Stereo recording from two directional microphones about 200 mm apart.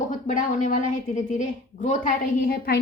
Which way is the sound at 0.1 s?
40° left (ahead or behind).